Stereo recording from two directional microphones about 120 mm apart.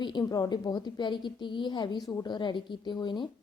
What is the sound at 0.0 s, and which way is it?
A woman's voice, 35° left (ahead or behind).